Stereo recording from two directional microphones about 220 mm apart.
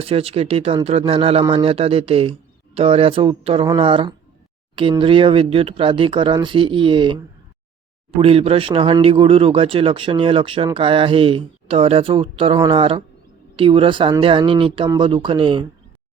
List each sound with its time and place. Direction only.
0.0 s speech: 25° right (ahead or behind)